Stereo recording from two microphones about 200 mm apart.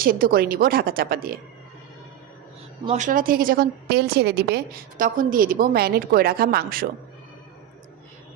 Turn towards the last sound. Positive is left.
turn(degrees=-50)  # may be behind; listen again after turning